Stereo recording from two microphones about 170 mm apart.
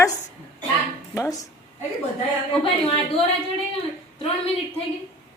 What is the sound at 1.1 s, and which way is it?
Speech, 20° left (ahead or behind).